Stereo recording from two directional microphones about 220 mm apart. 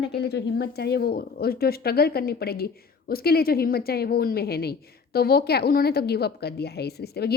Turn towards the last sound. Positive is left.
turn(degrees=45)  # may be behind; listen again after turning